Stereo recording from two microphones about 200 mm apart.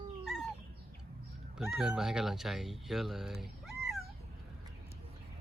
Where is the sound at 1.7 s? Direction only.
Centre (ahead or behind).